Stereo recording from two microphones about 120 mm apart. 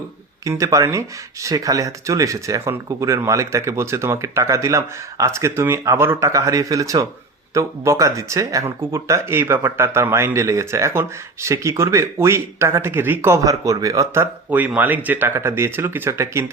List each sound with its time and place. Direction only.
0.4 s speech: 25° right (ahead or behind)